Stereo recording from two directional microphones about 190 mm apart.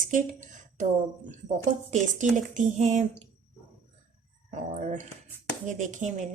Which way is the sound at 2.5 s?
40° right (ahead or behind).